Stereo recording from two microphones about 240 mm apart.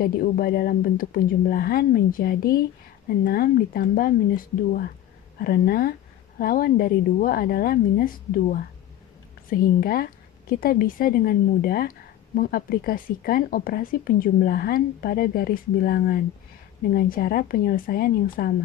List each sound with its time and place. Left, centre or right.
0.0 s speech: left